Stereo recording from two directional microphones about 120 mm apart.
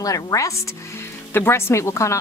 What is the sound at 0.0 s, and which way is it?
Speech, 30° left (ahead or behind).